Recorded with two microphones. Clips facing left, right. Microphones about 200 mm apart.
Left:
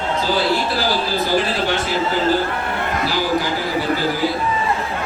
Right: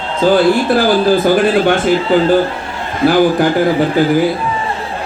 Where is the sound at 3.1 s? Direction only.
55° right (ahead or behind).